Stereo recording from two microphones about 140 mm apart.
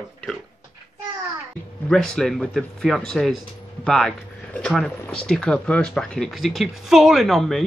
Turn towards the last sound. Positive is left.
turn(degrees=0)  # may be behind; listen again after turning